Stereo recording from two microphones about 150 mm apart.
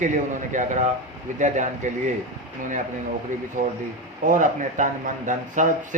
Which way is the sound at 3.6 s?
60° right (ahead or behind).